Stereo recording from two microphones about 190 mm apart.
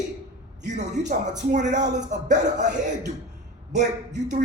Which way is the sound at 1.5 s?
40° right (ahead or behind).